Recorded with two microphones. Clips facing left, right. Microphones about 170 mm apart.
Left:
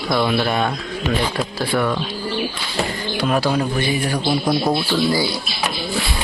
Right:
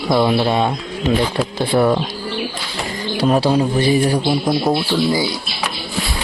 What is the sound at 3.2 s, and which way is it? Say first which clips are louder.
A man's voice: right 4 dB; 30° right (ahead or behind).